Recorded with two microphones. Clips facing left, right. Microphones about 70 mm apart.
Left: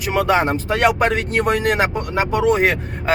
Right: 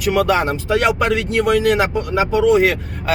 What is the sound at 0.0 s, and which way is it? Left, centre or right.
Speech, left.